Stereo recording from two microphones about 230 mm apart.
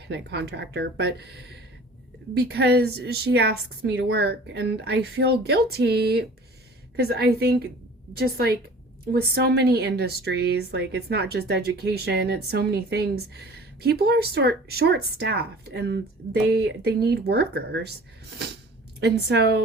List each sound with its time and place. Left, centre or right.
0.1 s speech: right
18.9 s speech: right